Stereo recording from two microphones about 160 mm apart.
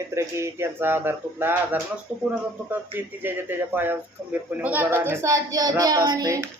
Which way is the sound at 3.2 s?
15° right (ahead or behind).